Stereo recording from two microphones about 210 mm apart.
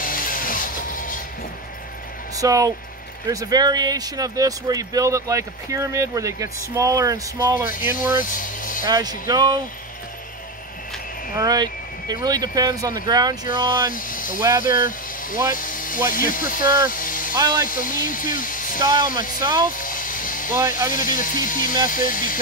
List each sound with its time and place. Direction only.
0.0 s music: 40° left (ahead or behind)
2.3 s speech: 15° right (ahead or behind)
8.2 s vehicle: 40° left (ahead or behind)
8.8 s speech: 20° right (ahead or behind)
11.3 s speech: 20° right (ahead or behind)
13.8 s speech: 40° left (ahead or behind)
17.4 s speech: 20° right (ahead or behind)
17.6 s speech: 40° left (ahead or behind)
18.8 s speech: 20° right (ahead or behind)
19.8 s a sound: 40° left (ahead or behind)
20.9 s speech: 40° left (ahead or behind)